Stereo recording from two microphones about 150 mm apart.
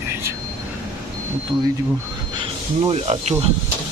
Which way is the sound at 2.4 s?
35° right (ahead or behind).